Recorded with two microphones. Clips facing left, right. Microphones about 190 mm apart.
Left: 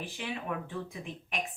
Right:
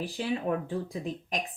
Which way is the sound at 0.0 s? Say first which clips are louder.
Right 7 dB; 35° right (ahead or behind).